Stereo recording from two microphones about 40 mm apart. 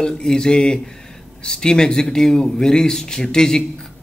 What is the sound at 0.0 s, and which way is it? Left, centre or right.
A man's voice, centre.